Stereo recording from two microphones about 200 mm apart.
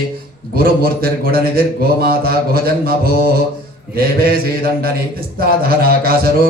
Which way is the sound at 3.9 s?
50° right (ahead or behind).